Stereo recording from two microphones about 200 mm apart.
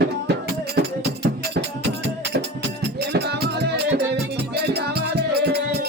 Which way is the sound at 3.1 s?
55° right (ahead or behind).